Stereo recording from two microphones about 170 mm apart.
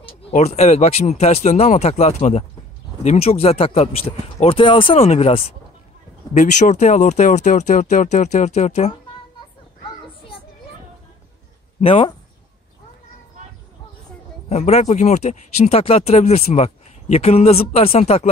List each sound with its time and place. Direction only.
0.3 s speech: 40° left (ahead or behind)
11.8 s speech: 35° left (ahead or behind)
14.5 s speech: 40° left (ahead or behind)